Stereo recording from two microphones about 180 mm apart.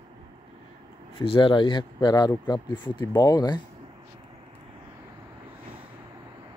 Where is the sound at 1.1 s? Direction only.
30° left (ahead or behind).